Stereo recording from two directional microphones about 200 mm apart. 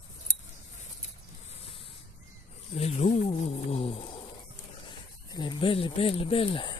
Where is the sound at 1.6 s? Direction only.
25° left (ahead or behind).